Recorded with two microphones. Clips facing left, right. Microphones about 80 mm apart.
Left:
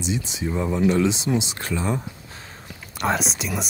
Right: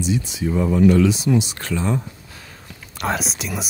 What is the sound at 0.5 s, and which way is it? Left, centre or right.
Speech, centre.